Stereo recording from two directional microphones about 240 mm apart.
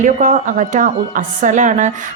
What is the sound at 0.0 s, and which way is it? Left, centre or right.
A woman's voice, right.